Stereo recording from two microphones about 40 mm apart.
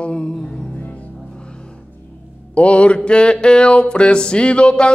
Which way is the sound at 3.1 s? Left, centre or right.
Left.